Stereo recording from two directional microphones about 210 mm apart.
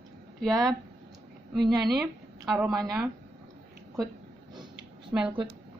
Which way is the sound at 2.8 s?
15° right (ahead or behind).